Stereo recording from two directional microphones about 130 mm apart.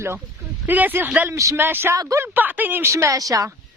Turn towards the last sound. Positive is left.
turn(degrees=-25)  # may be behind; listen again after turning